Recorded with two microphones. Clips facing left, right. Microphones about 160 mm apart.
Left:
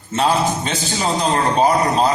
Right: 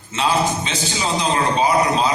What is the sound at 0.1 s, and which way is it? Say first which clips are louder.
A man's voice: left 2 dB; 50° left (ahead or behind).